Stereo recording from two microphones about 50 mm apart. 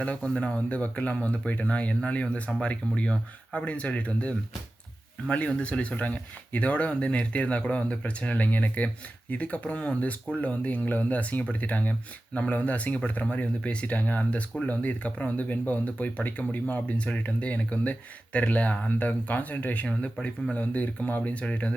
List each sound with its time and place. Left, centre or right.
0.0 s speech: left